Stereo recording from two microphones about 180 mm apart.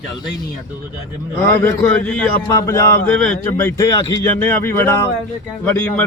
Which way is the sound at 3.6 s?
15° left (ahead or behind).